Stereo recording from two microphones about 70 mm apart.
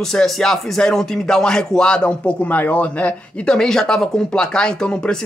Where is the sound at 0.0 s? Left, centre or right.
Centre.